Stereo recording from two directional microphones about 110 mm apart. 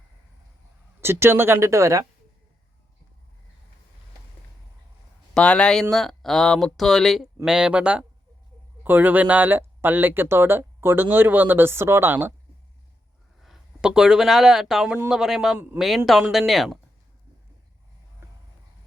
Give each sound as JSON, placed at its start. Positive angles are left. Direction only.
{"t": 1.0, "sound": "speech", "side_deg": -20}
{"t": 5.3, "sound": "speech", "side_deg": 10}
{"t": 13.4, "sound": "speech", "side_deg": -5}